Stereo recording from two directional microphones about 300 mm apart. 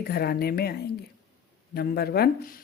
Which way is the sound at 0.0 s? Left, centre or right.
Left.